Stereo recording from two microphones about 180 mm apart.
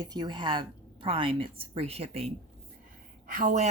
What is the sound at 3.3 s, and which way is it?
Speech, 45° right (ahead or behind).